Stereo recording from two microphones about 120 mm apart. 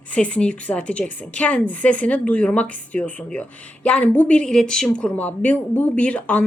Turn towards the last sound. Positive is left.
turn(degrees=10)  # may be behind; listen again after turning